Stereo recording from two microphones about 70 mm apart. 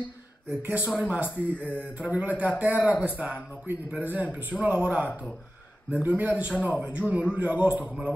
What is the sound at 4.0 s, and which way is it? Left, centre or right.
Speech, right.